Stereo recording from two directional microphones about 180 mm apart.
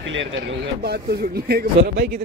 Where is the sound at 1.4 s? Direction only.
60° right (ahead or behind).